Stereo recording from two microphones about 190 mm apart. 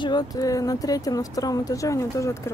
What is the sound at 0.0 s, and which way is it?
Speech, 20° left (ahead or behind).